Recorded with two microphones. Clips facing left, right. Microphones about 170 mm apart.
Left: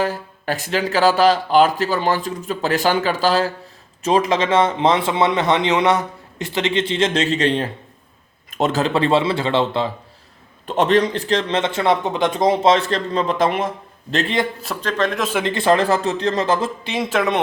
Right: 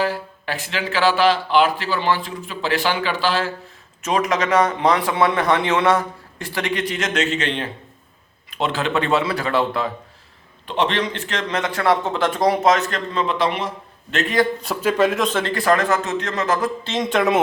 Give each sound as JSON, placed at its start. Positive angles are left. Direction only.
{"t": 0.0, "sound": "speech", "side_deg": 40}
{"t": 10.7, "sound": "speech", "side_deg": 45}
{"t": 14.1, "sound": "speech", "side_deg": 35}
{"t": 14.6, "sound": "a man's voice", "side_deg": -5}
{"t": 15.2, "sound": "speech", "side_deg": 10}
{"t": 15.5, "sound": "speech", "side_deg": 25}
{"t": 16.8, "sound": "speech", "side_deg": 10}